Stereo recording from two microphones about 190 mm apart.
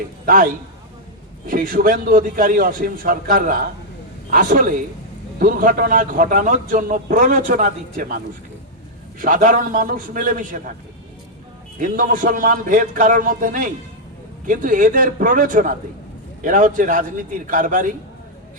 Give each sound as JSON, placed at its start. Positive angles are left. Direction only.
{"t": 0.3, "sound": "a man's voice", "side_deg": -45}
{"t": 9.2, "sound": "a man's voice", "side_deg": -45}
{"t": 11.8, "sound": "a man's voice", "side_deg": -45}